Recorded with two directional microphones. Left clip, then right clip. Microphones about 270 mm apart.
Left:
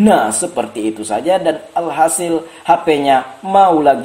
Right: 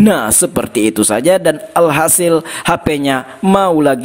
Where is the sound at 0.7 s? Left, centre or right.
Right.